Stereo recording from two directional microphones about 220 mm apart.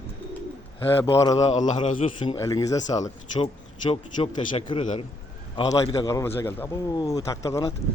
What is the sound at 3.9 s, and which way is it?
A man's voice, 25° left (ahead or behind).